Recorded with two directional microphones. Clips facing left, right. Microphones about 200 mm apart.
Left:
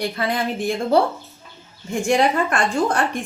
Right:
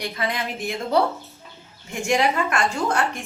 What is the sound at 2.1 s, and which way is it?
A woman's voice, 35° left (ahead or behind).